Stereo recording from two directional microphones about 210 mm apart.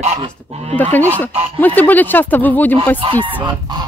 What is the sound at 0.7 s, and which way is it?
Speech, 10° left (ahead or behind).